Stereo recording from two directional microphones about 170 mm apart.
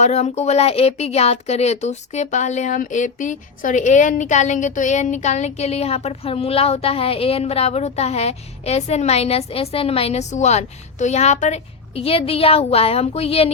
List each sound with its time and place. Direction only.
0.0 s speech: 40° left (ahead or behind)